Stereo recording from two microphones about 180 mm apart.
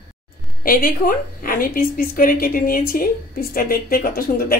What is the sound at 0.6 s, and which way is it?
Speech, 50° left (ahead or behind).